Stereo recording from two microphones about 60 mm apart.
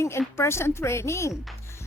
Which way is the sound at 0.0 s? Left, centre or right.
Left.